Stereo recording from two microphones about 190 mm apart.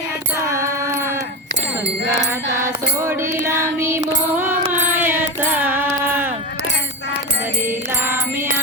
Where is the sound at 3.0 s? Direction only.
15° right (ahead or behind).